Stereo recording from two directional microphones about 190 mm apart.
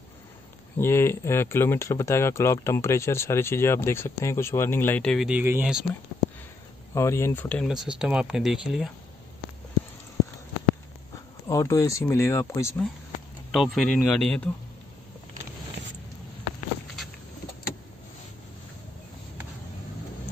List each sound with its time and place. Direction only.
0.7 s speech: 15° left (ahead or behind); by 5.9 s 5° right (ahead or behind)
6.9 s speech: 15° left (ahead or behind); by 8.9 s centre (ahead or behind)
11.4 s speech: 15° left (ahead or behind)
13.5 s speech: 5° left (ahead or behind)
15.8 s zipper: 70° right (ahead or behind)